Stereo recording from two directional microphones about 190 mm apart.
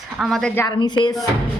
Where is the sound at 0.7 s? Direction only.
25° left (ahead or behind).